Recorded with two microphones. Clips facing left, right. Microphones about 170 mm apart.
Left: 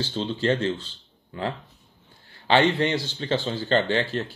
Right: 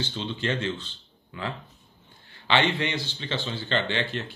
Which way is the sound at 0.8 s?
35° left (ahead or behind).